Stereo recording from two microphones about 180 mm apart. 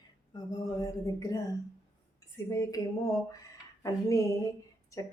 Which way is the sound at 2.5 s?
20° left (ahead or behind).